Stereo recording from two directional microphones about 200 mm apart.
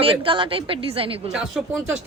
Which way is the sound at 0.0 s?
25° right (ahead or behind).